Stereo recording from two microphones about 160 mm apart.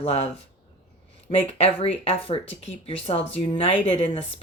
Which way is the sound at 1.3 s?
35° left (ahead or behind).